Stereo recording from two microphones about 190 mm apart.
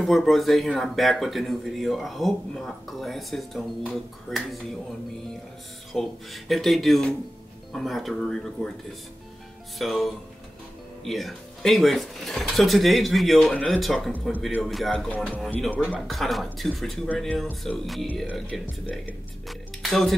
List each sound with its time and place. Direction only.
0.0 s speech: centre (ahead or behind)
5.9 s speech: centre (ahead or behind)
9.8 s speech: centre (ahead or behind)